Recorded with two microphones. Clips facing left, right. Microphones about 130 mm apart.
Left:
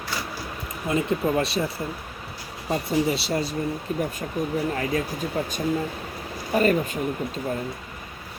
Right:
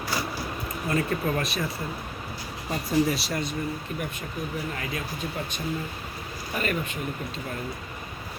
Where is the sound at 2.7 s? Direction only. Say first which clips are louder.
Left 1 dB; 25° left (ahead or behind).